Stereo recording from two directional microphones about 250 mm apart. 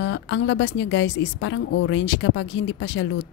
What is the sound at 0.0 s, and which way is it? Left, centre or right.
A woman's voice, left.